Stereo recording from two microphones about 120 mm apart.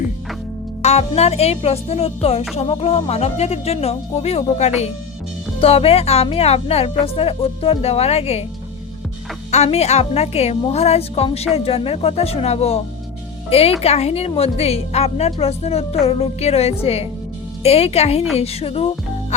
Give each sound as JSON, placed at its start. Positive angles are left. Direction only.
{"t": 0.8, "sound": "speech", "side_deg": 65}
{"t": 9.6, "sound": "speech", "side_deg": 60}